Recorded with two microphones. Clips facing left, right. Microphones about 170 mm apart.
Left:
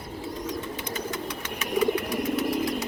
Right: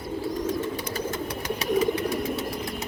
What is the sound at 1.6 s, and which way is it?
Bird, 30° right (ahead or behind).